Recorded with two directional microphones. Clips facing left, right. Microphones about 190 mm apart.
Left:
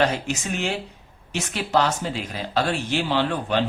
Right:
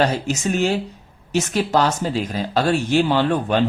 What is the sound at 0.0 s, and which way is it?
Speech, 40° right (ahead or behind).